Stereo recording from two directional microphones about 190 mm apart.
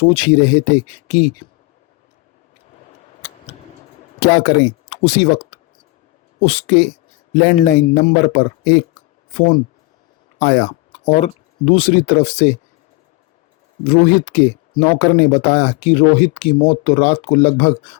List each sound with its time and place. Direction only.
0.0 s speech: 30° left (ahead or behind)
4.2 s speech: 45° left (ahead or behind)
13.8 s speech: 35° left (ahead or behind)